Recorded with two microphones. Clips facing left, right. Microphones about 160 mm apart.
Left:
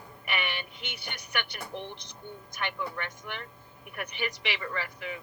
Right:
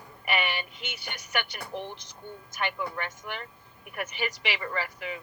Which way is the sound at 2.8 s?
50° right (ahead or behind).